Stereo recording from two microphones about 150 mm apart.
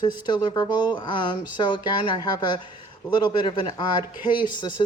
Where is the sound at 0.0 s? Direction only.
30° left (ahead or behind).